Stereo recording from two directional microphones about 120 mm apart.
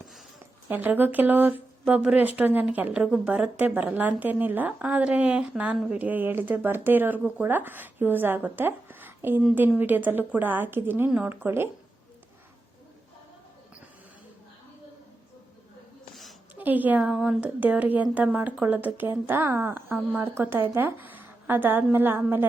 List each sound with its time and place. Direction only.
0.7 s speech: 15° right (ahead or behind)
16.6 s a woman's voice: 15° right (ahead or behind)
17.1 s speech: centre (ahead or behind)
17.4 s speech: 10° right (ahead or behind)